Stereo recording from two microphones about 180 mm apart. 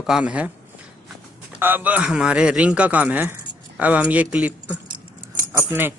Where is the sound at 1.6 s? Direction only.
10° right (ahead or behind).